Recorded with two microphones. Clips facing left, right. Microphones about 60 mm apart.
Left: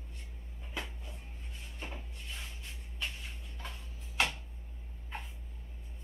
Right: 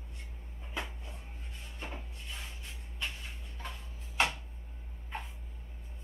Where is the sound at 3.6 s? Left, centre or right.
Right.